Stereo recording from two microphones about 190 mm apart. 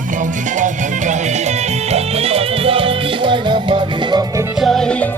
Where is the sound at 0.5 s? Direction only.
40° right (ahead or behind); by 4.2 s 25° right (ahead or behind).